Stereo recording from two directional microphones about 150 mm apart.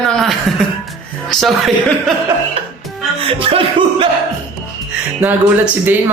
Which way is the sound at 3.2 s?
40° right (ahead or behind).